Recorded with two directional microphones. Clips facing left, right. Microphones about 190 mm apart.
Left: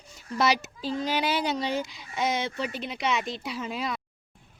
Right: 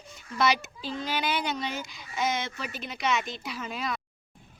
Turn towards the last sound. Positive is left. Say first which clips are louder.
# left 2 dB
turn(degrees=25)  # may be behind; listen again after turning